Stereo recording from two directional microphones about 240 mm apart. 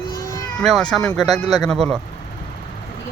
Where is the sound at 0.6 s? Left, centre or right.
Centre.